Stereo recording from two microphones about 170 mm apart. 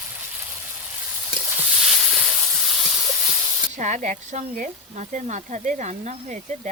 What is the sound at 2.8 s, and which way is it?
Steam, 5° right (ahead or behind).